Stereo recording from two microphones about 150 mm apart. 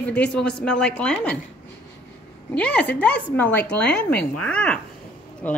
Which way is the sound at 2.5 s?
10° left (ahead or behind).